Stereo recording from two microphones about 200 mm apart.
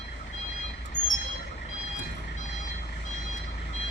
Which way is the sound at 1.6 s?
35° left (ahead or behind).